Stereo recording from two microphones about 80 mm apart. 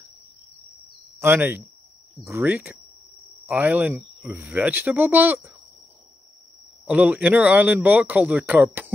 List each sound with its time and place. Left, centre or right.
1.2 s a man's voice: right
6.9 s a man's voice: centre